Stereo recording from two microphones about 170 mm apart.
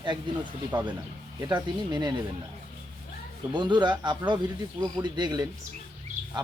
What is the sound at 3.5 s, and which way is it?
Speech, 25° right (ahead or behind).